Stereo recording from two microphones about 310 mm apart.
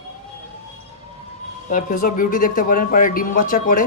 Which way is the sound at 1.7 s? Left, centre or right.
Left.